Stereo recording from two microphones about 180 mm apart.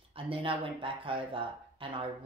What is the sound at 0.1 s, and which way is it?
Speech, 30° right (ahead or behind).